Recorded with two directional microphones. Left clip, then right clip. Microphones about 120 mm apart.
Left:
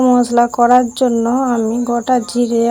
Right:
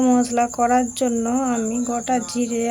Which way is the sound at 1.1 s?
20° left (ahead or behind).